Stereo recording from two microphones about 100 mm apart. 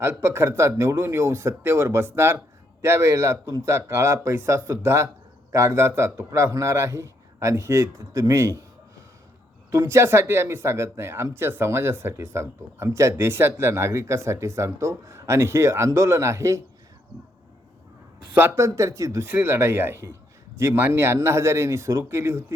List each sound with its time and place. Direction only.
0.0 s speech: 25° right (ahead or behind)
9.7 s speech: 25° right (ahead or behind)
18.3 s speech: 25° right (ahead or behind)